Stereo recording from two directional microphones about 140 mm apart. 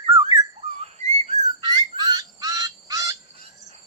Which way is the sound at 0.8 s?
50° right (ahead or behind).